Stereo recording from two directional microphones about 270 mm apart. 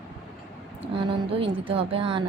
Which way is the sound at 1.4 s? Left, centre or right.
Centre.